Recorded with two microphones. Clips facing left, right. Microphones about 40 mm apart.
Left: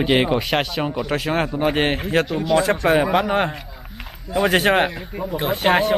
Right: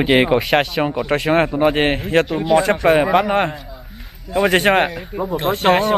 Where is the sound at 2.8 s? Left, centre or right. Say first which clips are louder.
Right 3 dB; centre.